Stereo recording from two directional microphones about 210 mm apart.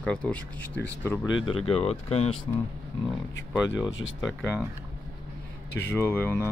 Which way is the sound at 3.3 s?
60° left (ahead or behind).